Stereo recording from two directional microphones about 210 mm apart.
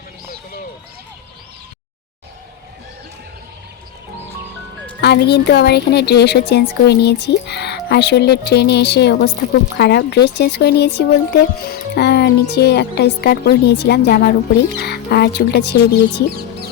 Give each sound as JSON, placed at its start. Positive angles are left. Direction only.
{"t": 4.9, "sound": "speech", "side_deg": 50}